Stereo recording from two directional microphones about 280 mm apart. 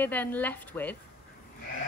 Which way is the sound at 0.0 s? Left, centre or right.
Centre.